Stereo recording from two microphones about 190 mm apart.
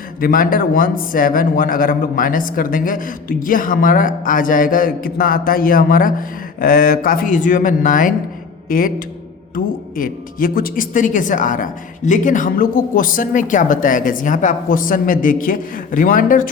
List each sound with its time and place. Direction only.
0.2 s a man's voice: 50° left (ahead or behind)
10.0 s a man's voice: 50° left (ahead or behind)